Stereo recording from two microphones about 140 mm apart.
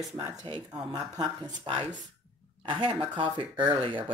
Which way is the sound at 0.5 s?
35° right (ahead or behind).